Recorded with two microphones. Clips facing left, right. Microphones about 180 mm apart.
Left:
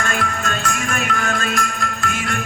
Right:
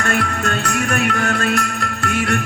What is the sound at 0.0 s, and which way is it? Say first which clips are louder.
Music: right 3 dB; 65° right (ahead or behind).